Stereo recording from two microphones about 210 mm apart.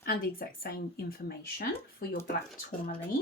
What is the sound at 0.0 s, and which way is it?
Speech, 45° left (ahead or behind).